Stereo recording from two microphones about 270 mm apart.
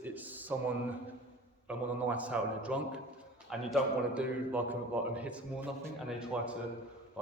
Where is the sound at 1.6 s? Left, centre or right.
Centre.